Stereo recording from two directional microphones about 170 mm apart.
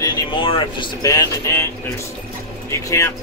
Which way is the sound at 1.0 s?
20° left (ahead or behind).